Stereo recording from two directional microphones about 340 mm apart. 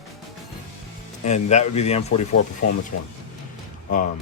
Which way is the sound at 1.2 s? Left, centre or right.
Centre.